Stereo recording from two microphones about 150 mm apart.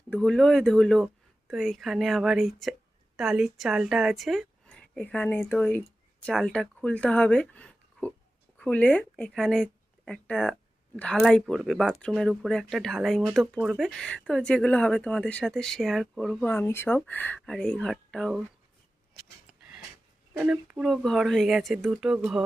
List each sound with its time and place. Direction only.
0.1 s a woman's voice: 5° left (ahead or behind)
16.5 s speech: 15° left (ahead or behind)
20.4 s speech: 5° right (ahead or behind)